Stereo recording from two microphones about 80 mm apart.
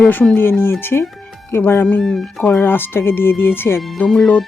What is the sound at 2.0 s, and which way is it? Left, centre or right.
Speech, centre.